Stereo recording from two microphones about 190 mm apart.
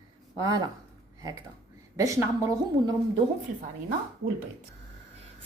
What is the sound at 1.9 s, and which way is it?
A woman's voice, 15° right (ahead or behind).